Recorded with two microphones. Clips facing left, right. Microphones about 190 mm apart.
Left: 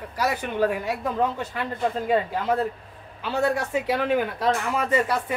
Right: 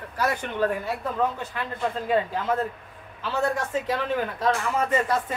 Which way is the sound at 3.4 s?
10° left (ahead or behind).